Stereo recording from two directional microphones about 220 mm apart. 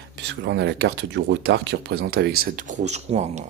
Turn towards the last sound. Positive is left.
turn(degrees=-30)  # may be behind; listen again after turning